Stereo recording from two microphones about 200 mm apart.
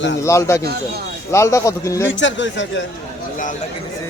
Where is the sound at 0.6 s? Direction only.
50° right (ahead or behind).